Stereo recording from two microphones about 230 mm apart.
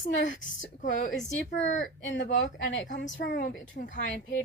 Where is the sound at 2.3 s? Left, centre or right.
Left.